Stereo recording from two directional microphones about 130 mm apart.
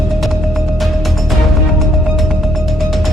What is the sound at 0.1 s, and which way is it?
Music, centre (ahead or behind).